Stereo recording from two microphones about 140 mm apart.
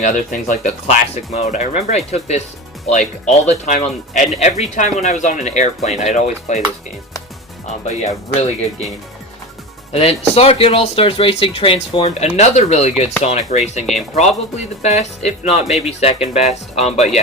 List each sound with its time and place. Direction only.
0.0 s speech: 65° left (ahead or behind)
7.9 s speech: 50° left (ahead or behind)
9.9 s speech: 45° left (ahead or behind)